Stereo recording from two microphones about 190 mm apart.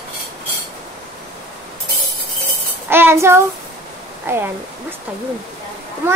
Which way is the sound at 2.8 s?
10° right (ahead or behind).